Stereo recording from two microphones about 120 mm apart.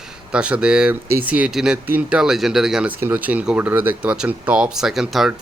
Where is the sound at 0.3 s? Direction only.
10° right (ahead or behind).